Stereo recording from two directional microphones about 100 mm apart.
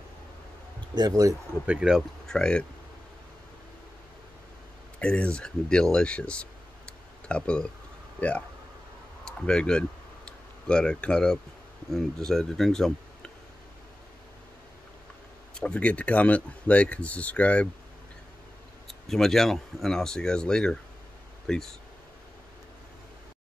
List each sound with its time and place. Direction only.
0.9 s speech: 40° right (ahead or behind)
1.7 s speech: 10° right (ahead or behind)
2.2 s speech: 5° left (ahead or behind)
4.9 s speech: 10° left (ahead or behind)
6.9 s a sound: 10° left (ahead or behind)
8.2 s speech: 15° left (ahead or behind)
9.2 s a sound: 10° left (ahead or behind)
11.9 s speech: 5° left (ahead or behind)
15.5 s speech: 10° left (ahead or behind)
18.9 s speech: 5° left (ahead or behind)